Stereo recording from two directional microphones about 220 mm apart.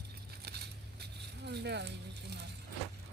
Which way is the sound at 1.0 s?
50° right (ahead or behind).